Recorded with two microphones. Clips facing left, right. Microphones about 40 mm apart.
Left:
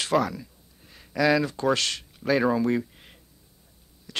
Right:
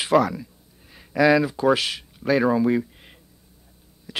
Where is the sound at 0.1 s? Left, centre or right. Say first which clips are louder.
Right 6 dB; centre.